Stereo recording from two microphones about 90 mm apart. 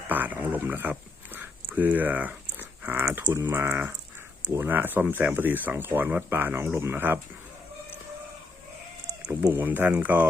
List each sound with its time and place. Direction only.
0.1 s a sound: 20° right (ahead or behind)
4.5 s speech: 20° right (ahead or behind)
9.5 s speech: 20° right (ahead or behind)